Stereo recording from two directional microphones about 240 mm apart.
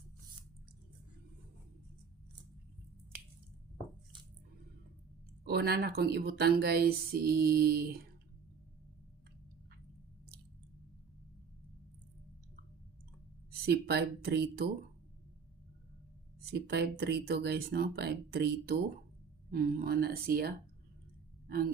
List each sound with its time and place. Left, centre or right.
5.5 s speech: right
13.5 s speech: right
16.4 s speech: right